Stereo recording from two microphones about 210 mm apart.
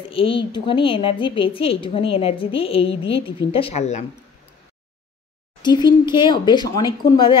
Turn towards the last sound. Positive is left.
turn(degrees=20)  # may be behind; listen again after turning